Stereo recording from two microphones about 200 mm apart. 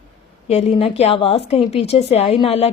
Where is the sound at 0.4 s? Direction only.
30° left (ahead or behind).